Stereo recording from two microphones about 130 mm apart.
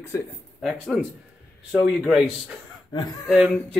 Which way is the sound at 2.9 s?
30° left (ahead or behind).